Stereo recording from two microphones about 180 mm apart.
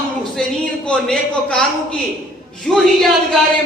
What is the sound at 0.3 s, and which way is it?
A man's voice, 5° left (ahead or behind).